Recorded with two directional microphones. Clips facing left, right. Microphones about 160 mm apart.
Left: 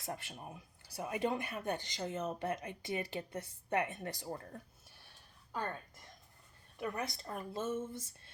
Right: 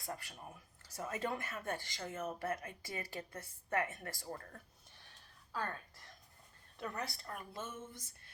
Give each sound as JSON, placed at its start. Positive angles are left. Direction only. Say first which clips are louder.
{"t": 0.0, "sound": "speech", "louder": "left 3 dB", "side_deg": 20}
{"t": 6.7, "sound": "speech", "louder": "left 4 dB", "side_deg": 15}